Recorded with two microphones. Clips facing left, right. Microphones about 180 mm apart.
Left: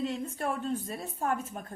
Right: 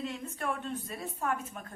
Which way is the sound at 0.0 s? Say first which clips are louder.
Left 4 dB; 35° left (ahead or behind).